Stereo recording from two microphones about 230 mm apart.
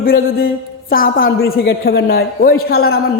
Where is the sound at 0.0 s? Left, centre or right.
Left.